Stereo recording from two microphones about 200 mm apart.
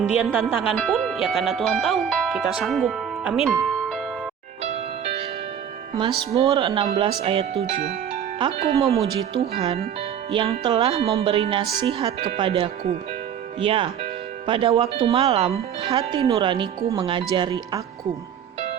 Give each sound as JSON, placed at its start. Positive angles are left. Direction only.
{"t": 0.7, "sound": "speech", "side_deg": 0}
{"t": 3.6, "sound": "music", "side_deg": 5}
{"t": 4.6, "sound": "music", "side_deg": -30}
{"t": 5.9, "sound": "speech", "side_deg": -25}